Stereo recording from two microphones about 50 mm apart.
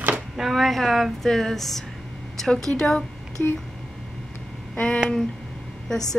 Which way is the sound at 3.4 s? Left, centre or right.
Left.